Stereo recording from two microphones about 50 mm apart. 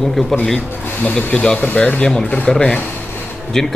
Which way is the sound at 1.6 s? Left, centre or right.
Left.